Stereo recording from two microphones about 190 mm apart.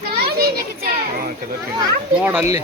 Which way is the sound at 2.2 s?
10° right (ahead or behind).